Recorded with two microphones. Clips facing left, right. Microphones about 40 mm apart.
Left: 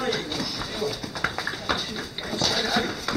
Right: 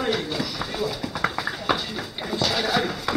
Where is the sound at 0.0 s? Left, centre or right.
Centre.